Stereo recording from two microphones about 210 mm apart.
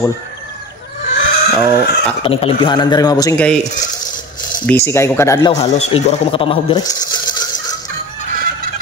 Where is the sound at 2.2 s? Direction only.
25° left (ahead or behind).